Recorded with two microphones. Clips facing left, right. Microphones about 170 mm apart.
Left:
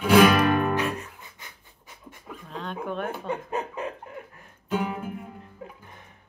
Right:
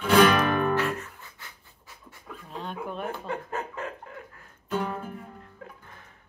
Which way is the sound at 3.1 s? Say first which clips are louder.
Left 3 dB; 20° left (ahead or behind).